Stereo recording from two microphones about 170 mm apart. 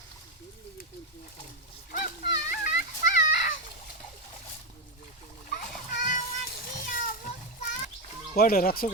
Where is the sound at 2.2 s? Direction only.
60° left (ahead or behind).